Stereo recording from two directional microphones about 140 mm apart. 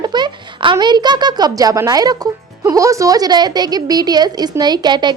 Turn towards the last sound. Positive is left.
turn(degrees=-30)  # may be behind; listen again after turning